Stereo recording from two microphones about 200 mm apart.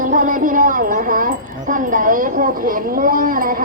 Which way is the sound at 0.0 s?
40° right (ahead or behind).